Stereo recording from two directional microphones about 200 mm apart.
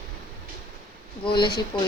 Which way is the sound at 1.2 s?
25° left (ahead or behind).